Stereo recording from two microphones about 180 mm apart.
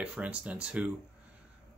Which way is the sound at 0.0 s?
5° right (ahead or behind).